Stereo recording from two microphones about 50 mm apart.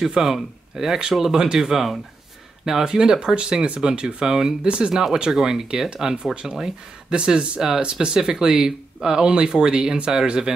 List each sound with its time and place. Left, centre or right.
0.0 s speech: centre